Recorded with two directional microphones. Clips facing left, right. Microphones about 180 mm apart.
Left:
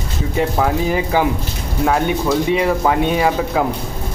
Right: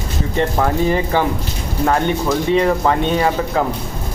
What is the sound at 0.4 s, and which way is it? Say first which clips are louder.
Speech: even; 5° left (ahead or behind).